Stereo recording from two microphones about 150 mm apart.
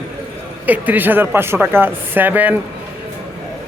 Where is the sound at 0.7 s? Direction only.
10° right (ahead or behind).